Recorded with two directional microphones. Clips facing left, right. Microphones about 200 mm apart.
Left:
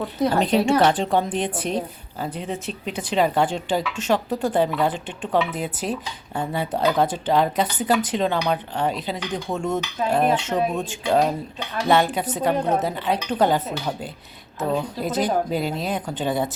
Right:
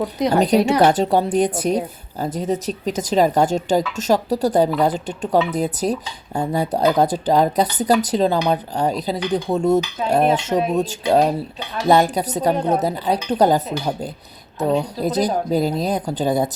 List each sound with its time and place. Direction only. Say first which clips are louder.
0.0 s a woman's voice: right 2 dB; 15° right (ahead or behind)
0.3 s a woman's voice: right 4 dB; 40° right (ahead or behind)